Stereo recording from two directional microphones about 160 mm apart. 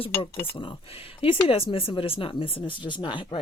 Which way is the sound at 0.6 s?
35° left (ahead or behind).